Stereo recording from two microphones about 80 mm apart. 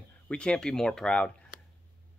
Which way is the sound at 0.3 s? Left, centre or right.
Centre.